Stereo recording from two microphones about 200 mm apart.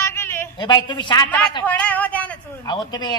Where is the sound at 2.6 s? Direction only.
20° left (ahead or behind).